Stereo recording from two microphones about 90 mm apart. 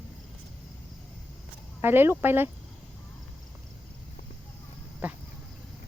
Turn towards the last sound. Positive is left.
turn(degrees=-15)  # may be behind; listen again after turning